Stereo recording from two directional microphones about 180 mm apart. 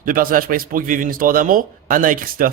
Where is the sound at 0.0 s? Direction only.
50° right (ahead or behind).